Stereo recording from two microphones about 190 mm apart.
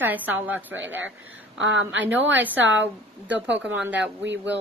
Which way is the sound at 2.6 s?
75° right (ahead or behind).